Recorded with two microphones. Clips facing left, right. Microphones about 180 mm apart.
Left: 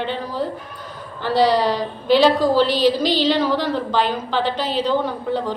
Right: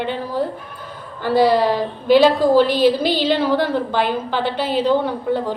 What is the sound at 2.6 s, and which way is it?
Speech, 50° right (ahead or behind).